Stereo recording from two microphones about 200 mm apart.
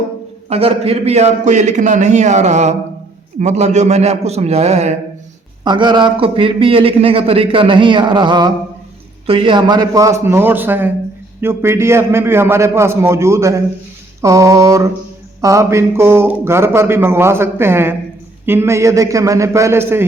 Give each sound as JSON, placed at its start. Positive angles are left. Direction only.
{"t": 0.4, "sound": "a man's voice", "side_deg": -30}
{"t": 5.6, "sound": "a man's voice", "side_deg": -20}